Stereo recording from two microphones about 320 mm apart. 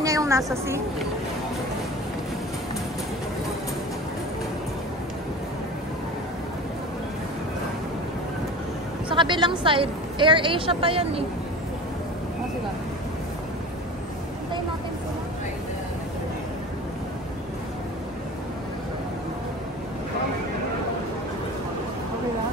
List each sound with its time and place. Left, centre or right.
0.0 s a woman's voice: centre
9.1 s a woman's voice: centre